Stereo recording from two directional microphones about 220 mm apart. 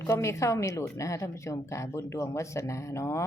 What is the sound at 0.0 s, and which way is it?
A woman's voice, 10° left (ahead or behind).